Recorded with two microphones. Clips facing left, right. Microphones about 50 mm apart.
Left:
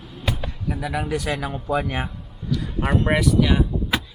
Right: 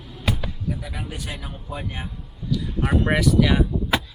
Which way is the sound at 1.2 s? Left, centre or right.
Left.